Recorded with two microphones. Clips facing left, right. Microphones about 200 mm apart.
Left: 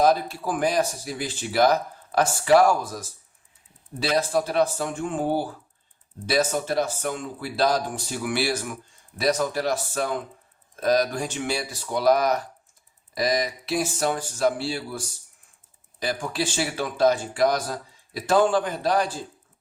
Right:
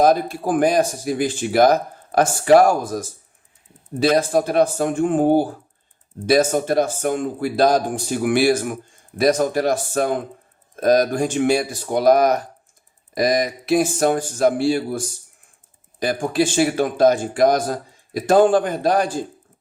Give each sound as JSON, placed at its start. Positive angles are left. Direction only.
{"t": 0.0, "sound": "speech", "side_deg": -50}